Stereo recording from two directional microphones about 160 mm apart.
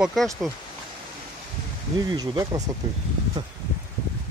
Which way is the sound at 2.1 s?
25° right (ahead or behind).